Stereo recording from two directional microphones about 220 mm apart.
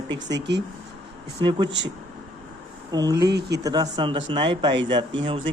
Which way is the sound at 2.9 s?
15° right (ahead or behind).